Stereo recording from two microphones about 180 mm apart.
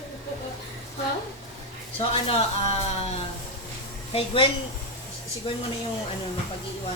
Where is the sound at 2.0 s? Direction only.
30° left (ahead or behind).